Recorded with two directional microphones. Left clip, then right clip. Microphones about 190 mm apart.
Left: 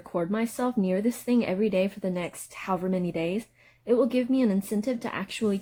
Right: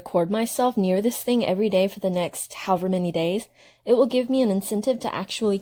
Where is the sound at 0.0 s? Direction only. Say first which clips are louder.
Right 6 dB; 45° right (ahead or behind).